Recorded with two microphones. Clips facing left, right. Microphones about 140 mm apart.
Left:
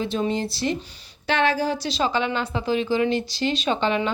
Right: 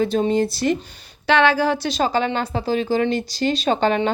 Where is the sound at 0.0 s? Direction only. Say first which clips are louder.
Right 6 dB; 40° right (ahead or behind).